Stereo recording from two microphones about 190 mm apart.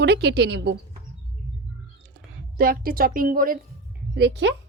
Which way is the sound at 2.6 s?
50° right (ahead or behind).